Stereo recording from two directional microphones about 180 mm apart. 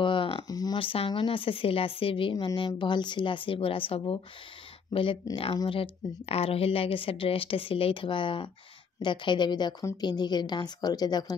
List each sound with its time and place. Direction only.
0.0 s speech: 30° left (ahead or behind)